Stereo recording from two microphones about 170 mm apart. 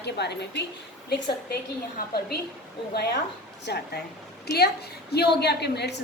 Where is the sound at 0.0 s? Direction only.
80° left.